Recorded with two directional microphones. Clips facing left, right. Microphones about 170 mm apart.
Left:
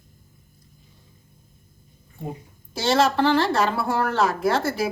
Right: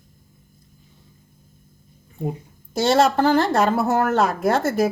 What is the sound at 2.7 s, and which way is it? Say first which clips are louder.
A woman's voice: right 3 dB; 50° right (ahead or behind).